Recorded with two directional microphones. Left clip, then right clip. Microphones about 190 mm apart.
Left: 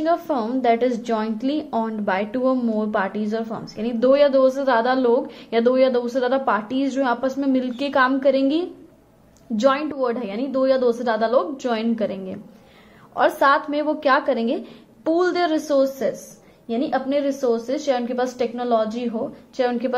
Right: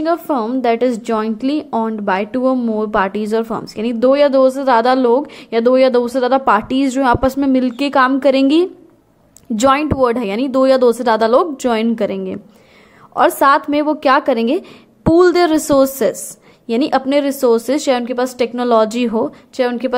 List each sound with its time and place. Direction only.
0.0 s a woman's voice: 25° right (ahead or behind); by 19.6 s 45° right (ahead or behind)
19.6 s a woman's voice: 30° right (ahead or behind)